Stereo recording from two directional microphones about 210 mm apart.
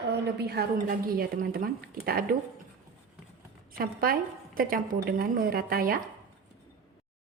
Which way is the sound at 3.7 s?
45° right (ahead or behind).